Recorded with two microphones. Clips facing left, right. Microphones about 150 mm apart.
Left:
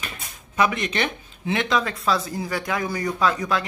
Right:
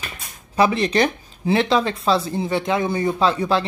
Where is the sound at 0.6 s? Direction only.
30° right (ahead or behind).